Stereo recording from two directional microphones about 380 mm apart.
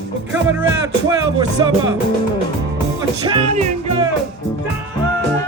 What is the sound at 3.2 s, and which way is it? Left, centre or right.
Music, centre.